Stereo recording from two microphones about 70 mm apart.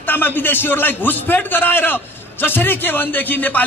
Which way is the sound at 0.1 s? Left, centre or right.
Left.